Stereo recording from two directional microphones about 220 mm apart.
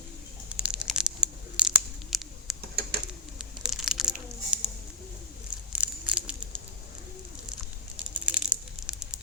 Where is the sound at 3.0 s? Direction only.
5° right (ahead or behind).